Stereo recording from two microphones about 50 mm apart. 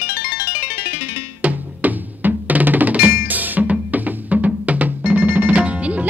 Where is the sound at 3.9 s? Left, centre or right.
Right.